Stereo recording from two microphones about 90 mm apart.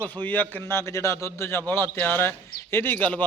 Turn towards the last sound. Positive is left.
turn(degrees=20)  # may be behind; listen again after turning